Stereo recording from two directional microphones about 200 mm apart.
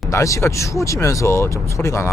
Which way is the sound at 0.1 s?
15° left (ahead or behind).